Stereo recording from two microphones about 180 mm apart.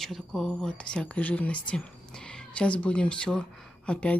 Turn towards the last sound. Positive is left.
turn(degrees=5)  # may be behind; listen again after turning